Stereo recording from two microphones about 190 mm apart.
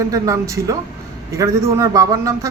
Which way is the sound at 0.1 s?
15° right (ahead or behind).